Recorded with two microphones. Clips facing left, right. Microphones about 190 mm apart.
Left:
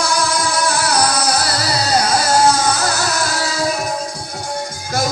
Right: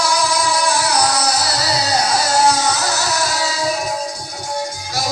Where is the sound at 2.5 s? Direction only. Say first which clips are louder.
Left 1 dB; 50° left (ahead or behind).